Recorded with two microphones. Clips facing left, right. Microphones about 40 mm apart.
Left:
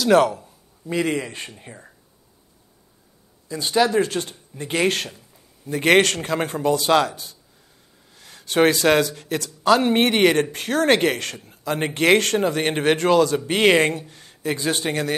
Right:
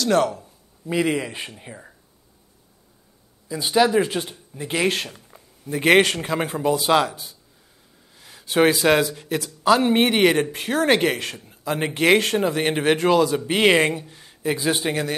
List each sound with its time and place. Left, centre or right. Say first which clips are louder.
0.0 s speech: left 3 dB; centre
0.8 s speech: right 1 dB; centre
3.4 s speech: right 1 dB; centre